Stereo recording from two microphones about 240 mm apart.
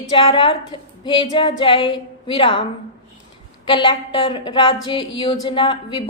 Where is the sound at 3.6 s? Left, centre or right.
Centre.